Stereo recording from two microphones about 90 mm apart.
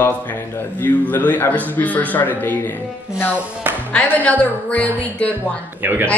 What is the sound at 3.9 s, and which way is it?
Speech, 15° left (ahead or behind).